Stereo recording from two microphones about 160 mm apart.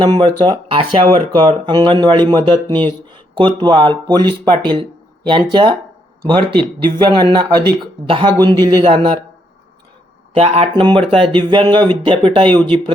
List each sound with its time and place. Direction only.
0.0 s speech: 30° right (ahead or behind)
10.3 s speech: 40° right (ahead or behind)